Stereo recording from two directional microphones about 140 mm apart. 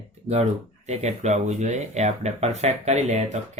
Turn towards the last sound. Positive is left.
turn(degrees=-55)  # may be behind; listen again after turning